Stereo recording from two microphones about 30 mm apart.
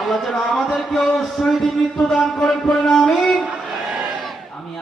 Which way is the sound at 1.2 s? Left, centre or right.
Centre.